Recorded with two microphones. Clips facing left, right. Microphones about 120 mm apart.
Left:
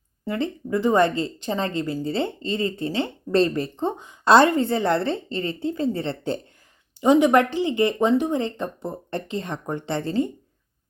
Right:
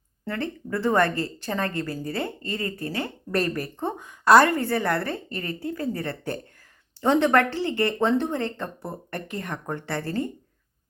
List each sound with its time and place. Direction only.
0.3 s speech: 15° left (ahead or behind)